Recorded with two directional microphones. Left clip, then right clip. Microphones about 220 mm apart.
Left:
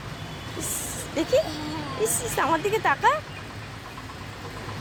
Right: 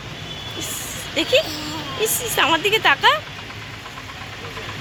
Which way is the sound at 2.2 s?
Centre (ahead or behind).